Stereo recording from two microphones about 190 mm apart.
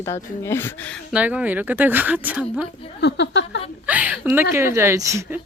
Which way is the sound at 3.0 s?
65° left (ahead or behind).